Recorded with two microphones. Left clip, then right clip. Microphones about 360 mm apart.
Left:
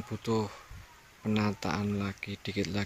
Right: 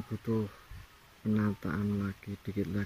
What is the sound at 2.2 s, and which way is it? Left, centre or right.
Speech, left.